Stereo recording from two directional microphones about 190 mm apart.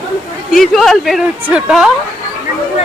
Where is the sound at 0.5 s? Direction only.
Centre (ahead or behind).